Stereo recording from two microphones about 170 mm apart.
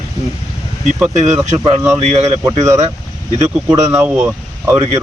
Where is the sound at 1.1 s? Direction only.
45° right (ahead or behind).